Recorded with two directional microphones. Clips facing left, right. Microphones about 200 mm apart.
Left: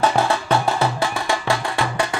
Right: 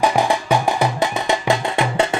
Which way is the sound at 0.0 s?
15° right (ahead or behind).